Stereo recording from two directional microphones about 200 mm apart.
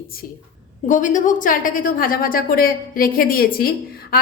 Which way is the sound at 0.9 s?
40° left (ahead or behind).